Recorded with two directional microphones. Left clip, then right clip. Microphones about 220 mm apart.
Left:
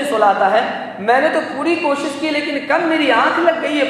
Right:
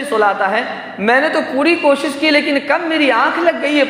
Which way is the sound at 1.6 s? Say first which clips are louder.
Right 7 dB; 50° right (ahead or behind).